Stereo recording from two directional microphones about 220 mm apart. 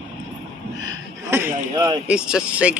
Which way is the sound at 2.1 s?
5° right (ahead or behind).